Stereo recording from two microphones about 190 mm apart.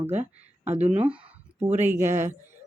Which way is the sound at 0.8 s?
10° right (ahead or behind).